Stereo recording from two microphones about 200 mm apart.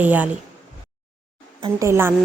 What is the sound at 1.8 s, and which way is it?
Speech, 10° right (ahead or behind).